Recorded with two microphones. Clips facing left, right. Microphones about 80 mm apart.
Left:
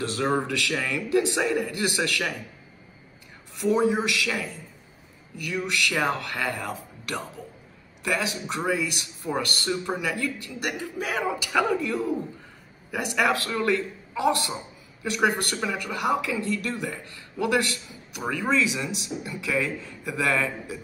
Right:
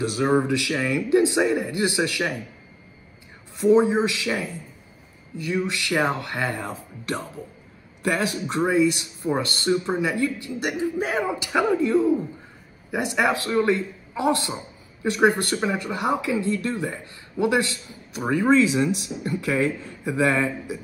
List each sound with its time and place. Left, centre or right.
0.0 s speech: centre
3.5 s speech: right
8.0 s speech: right
20.1 s speech: right